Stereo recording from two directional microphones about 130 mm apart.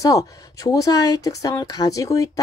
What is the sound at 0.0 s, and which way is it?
Speech, 25° left (ahead or behind).